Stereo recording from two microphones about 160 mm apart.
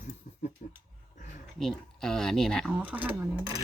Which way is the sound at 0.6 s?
55° left (ahead or behind).